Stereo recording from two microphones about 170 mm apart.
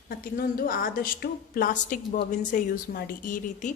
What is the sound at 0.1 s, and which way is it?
A woman's voice, 55° left (ahead or behind).